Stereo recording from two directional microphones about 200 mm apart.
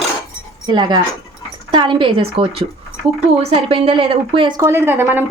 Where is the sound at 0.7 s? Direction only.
20° right (ahead or behind).